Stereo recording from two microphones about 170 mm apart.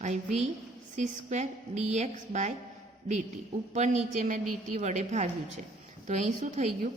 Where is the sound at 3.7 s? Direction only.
45° right (ahead or behind).